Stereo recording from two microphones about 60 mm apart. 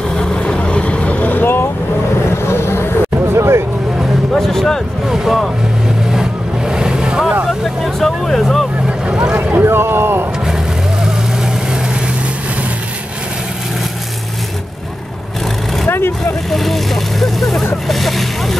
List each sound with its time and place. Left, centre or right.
0.1 s vehicle: centre; by 2.9 s left
3.3 s hubbub: right
4.3 s a sound: centre
5.1 s vehicle: centre
7.4 s vehicle: centre
8.8 s vehicle: centre
9.4 s a sound: right
16.4 s vehicle: centre